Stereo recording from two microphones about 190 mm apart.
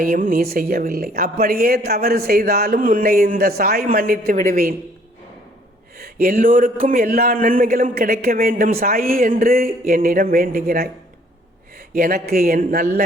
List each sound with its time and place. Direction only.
0.0 s a woman's voice: 45° right (ahead or behind)
6.0 s a woman's voice: 50° right (ahead or behind)
11.9 s a woman's voice: 50° right (ahead or behind)